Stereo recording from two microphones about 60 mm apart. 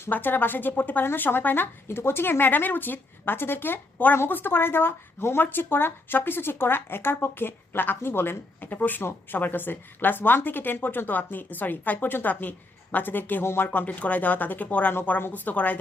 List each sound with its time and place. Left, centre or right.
0.1 s a woman's voice: left
13.4 s speech: left
13.7 s speech: left